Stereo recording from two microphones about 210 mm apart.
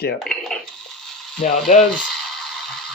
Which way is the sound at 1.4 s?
35° left (ahead or behind).